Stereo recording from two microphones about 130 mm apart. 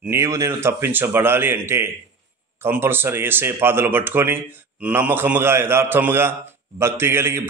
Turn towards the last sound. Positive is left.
turn(degrees=-20)  # may be behind; listen again after turning